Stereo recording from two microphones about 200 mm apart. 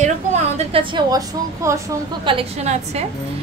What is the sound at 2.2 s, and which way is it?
Speech, 30° right (ahead or behind).